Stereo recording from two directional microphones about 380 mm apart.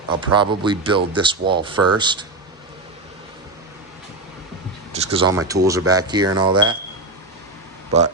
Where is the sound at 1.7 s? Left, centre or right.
Right.